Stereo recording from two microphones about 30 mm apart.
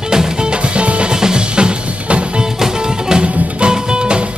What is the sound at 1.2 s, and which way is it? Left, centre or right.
Music, right.